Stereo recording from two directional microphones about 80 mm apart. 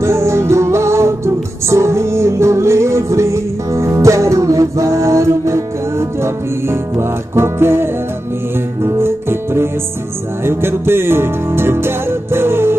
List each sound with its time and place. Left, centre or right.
0.0 s music: right